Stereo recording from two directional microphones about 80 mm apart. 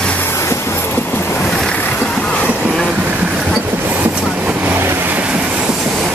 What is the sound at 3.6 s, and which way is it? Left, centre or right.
Train, right.